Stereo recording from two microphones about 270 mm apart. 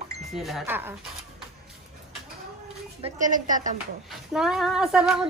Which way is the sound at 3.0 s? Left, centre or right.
Right.